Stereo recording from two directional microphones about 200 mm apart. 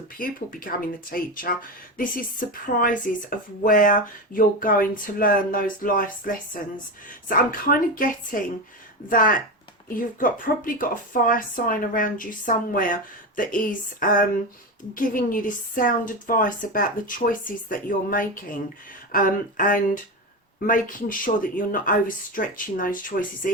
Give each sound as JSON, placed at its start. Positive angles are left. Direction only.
{"t": 0.2, "sound": "speech", "side_deg": 45}